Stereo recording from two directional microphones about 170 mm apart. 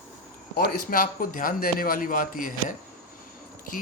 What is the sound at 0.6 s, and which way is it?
A man's voice, 55° left (ahead or behind).